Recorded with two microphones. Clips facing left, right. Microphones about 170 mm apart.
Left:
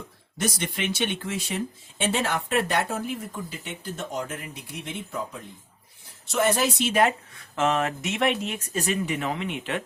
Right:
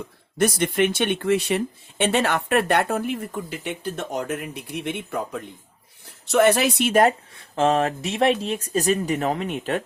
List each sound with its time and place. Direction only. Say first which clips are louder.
0.3 s speech: right 9 dB; 55° right (ahead or behind)
7.3 s speech: right 3 dB; 30° right (ahead or behind)